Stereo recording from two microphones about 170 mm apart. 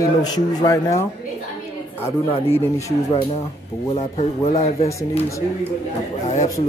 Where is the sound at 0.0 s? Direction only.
20° left (ahead or behind).